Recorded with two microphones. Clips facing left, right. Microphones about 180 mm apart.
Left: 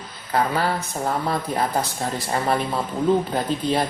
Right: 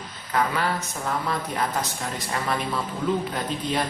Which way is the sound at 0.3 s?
35° left (ahead or behind).